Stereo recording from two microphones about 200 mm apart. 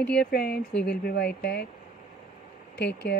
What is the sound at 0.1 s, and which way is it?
Speech, 55° left (ahead or behind).